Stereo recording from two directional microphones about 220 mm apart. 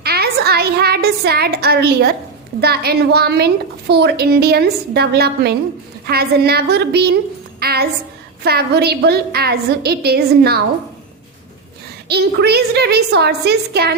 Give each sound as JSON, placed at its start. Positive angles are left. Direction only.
{"t": 0.0, "sound": "a woman's voice", "side_deg": -45}
{"t": 12.0, "sound": "a woman's voice", "side_deg": -45}